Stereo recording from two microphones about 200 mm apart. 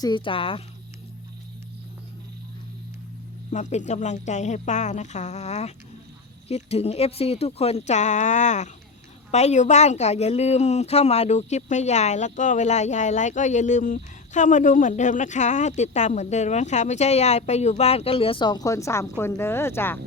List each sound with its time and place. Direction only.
0.0 s speech: 25° left (ahead or behind)
3.5 s speech: 35° left (ahead or behind); by 20.0 s 10° left (ahead or behind)